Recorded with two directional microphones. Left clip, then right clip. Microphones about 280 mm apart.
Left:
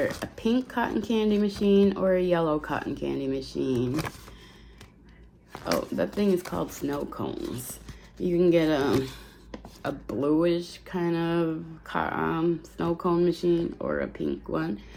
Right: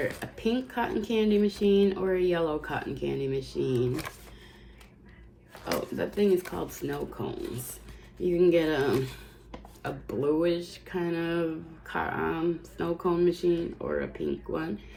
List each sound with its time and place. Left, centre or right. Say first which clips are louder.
0.1 s speech: left 3 dB; centre
5.6 s speech: left 4 dB; centre